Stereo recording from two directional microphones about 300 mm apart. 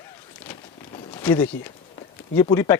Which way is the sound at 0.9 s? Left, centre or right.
Centre.